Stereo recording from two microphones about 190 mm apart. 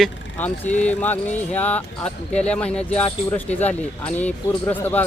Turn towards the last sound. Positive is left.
turn(degrees=10)  # may be behind; listen again after turning